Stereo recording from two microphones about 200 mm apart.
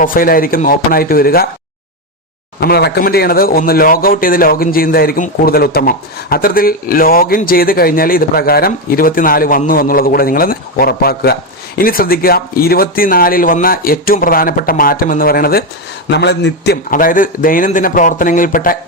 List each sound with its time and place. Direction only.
0.0 s speech: 45° left (ahead or behind)
2.6 s speech: 55° left (ahead or behind)